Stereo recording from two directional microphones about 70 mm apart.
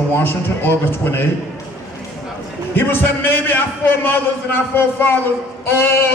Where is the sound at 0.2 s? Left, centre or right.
Left.